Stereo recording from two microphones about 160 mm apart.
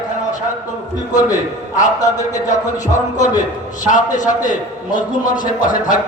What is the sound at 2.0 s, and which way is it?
Speech, 20° left (ahead or behind).